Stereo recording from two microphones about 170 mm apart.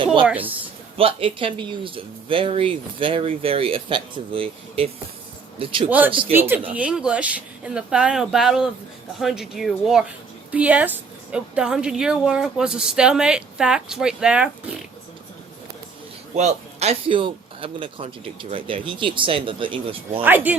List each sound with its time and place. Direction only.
0.0 s a sound: 30° right (ahead or behind)
0.3 s a woman's voice: 10° right (ahead or behind)
0.9 s speech: 30° right (ahead or behind)
6.3 s a woman's voice: 10° right (ahead or behind)
16.3 s speech: 40° right (ahead or behind)
20.2 s a woman's voice: 10° right (ahead or behind)